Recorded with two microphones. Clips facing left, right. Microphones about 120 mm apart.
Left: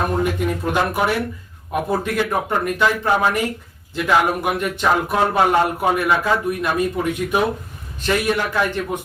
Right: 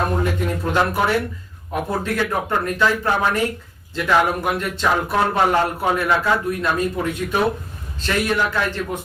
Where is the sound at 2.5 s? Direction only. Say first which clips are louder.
Even; 15° left (ahead or behind).